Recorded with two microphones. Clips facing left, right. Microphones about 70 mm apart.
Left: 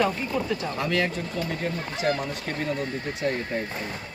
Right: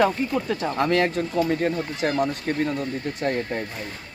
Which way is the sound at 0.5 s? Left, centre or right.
Right.